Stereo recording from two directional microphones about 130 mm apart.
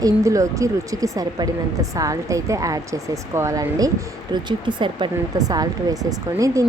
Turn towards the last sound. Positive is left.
turn(degrees=-25)  # may be behind; listen again after turning